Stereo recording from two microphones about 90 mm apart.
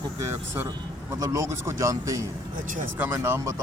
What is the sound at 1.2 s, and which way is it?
A man's voice, 35° right (ahead or behind).